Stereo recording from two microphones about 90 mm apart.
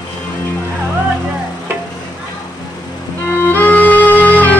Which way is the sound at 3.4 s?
20° left (ahead or behind).